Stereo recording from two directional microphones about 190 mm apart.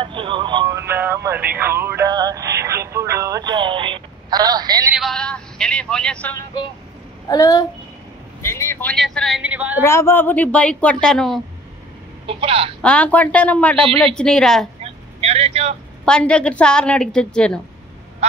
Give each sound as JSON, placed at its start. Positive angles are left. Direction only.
{"t": 0.0, "sound": "music", "side_deg": -25}
{"t": 4.9, "sound": "speech", "side_deg": 0}
{"t": 7.2, "sound": "speech", "side_deg": 20}
{"t": 9.8, "sound": "speech", "side_deg": 15}
{"t": 12.3, "sound": "a woman's voice", "side_deg": -30}
{"t": 12.8, "sound": "a woman's voice", "side_deg": 5}
{"t": 14.8, "sound": "vehicle", "side_deg": -35}
{"t": 16.1, "sound": "a woman's voice", "side_deg": 5}